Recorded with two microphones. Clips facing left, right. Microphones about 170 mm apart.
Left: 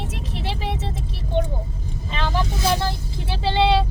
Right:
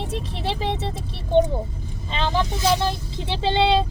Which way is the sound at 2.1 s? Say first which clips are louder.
Right 2 dB; 25° right (ahead or behind).